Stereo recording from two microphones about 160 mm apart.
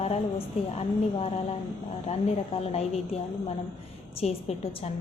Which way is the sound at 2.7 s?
40° left (ahead or behind).